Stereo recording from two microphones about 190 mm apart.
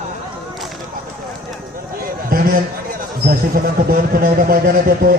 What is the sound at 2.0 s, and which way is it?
Speech, 50° right (ahead or behind).